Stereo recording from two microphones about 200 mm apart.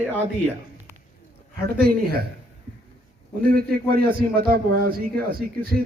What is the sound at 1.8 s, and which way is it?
Speech, 50° right (ahead or behind).